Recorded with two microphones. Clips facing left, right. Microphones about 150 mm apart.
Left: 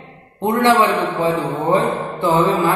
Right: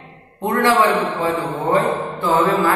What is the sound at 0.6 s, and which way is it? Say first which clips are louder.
A man's voice: left 1 dB; 20° left (ahead or behind).